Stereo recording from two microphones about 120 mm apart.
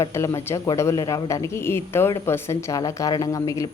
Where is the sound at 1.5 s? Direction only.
20° left (ahead or behind).